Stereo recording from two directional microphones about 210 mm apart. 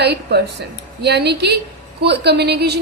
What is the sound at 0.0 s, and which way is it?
A woman's voice, 50° right (ahead or behind).